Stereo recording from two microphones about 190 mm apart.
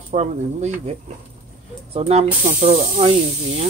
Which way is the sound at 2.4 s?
45° right (ahead or behind).